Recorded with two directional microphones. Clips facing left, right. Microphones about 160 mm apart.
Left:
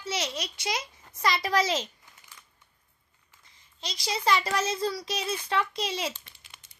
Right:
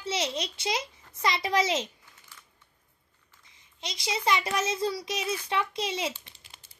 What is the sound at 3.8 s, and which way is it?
A child's voice, 20° right (ahead or behind).